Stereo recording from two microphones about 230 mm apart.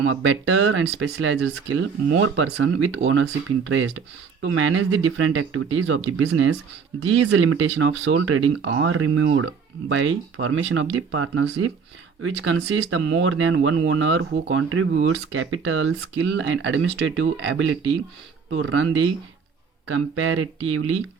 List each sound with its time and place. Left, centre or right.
0.0 s speech: right